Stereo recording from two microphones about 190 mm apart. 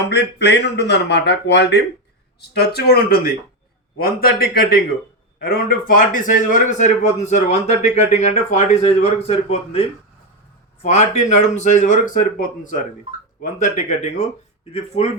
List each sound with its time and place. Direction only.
0.1 s a man's voice: 65° left (ahead or behind); by 9.8 s 30° left (ahead or behind)
10.8 s a man's voice: 35° left (ahead or behind)